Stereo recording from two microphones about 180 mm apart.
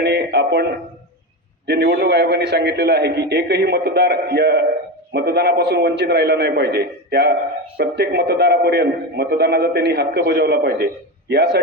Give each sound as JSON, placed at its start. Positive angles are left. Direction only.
{"t": 0.0, "sound": "music", "side_deg": -65}
{"t": 1.6, "sound": "a man's voice", "side_deg": -65}